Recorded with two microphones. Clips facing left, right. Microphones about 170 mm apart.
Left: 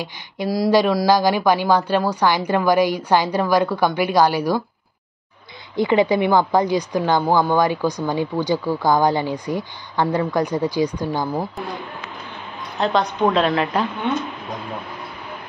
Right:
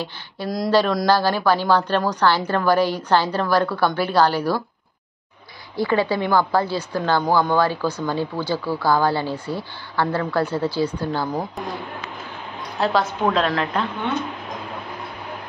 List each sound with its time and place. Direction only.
0.5 s a woman's voice: 10° left (ahead or behind)
5.8 s a woman's voice: 20° left (ahead or behind)
12.7 s a woman's voice: 5° right (ahead or behind)